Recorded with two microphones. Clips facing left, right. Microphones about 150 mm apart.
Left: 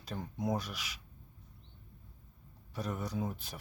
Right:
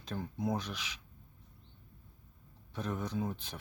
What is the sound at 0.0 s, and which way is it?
Speech, 5° left (ahead or behind).